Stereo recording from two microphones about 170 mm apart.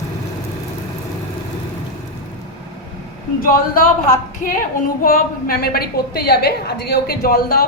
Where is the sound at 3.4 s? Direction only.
55° left (ahead or behind).